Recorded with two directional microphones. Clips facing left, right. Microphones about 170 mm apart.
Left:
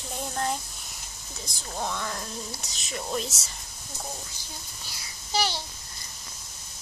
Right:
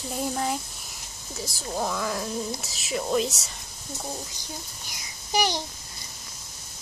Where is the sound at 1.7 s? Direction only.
5° right (ahead or behind).